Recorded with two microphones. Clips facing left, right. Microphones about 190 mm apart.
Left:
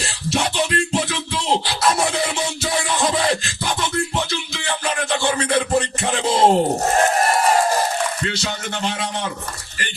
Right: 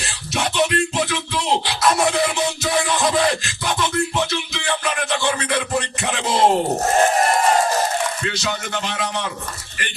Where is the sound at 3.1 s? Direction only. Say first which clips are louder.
Right 1 dB; 30° left (ahead or behind).